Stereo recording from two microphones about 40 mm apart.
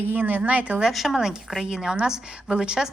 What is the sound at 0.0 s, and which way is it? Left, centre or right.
Speech, right.